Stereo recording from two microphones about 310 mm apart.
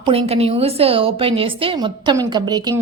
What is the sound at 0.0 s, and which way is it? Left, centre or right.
A woman's voice, centre.